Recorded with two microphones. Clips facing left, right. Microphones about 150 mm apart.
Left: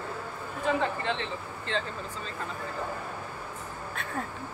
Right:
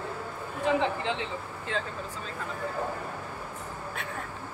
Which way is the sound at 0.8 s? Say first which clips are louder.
Right 1 dB; 10° right (ahead or behind).